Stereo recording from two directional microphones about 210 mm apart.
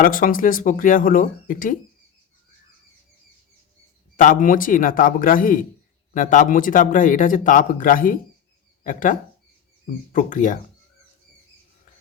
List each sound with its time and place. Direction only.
0.0 s speech: 40° left (ahead or behind)
4.2 s speech: 40° left (ahead or behind)